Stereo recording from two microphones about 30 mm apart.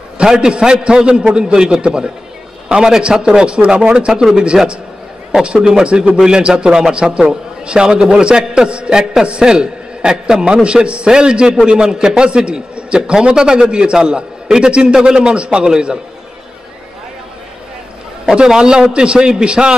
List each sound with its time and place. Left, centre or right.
0.2 s a man's voice: right
3.0 s speech: right
4.1 s a man's voice: centre
5.4 s a man's voice: right
18.2 s a sound: right
18.6 s a man's voice: right